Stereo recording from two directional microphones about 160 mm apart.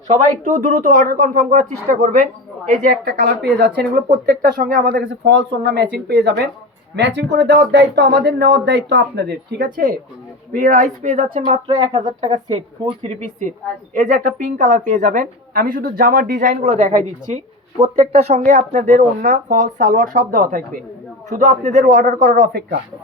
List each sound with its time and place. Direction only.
0.1 s speech: 50° right (ahead or behind)
11.5 s a woman's voice: 25° right (ahead or behind); by 20.8 s 60° right (ahead or behind)
21.2 s speech: 50° right (ahead or behind); by 22.8 s 75° right (ahead or behind)